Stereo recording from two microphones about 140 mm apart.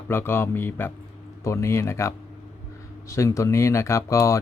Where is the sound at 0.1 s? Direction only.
15° left (ahead or behind).